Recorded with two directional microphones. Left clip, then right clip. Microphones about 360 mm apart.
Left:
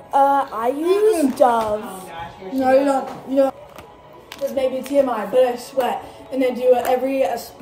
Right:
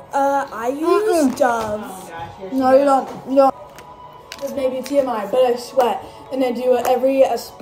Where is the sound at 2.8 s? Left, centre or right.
Centre.